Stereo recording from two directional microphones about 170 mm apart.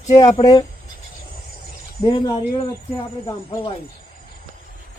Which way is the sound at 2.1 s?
30° left (ahead or behind).